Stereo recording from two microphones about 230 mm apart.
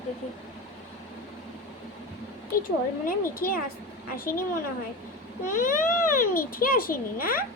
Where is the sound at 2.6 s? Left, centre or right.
Left.